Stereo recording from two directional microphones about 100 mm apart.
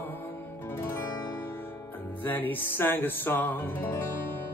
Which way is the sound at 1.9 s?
20° left (ahead or behind).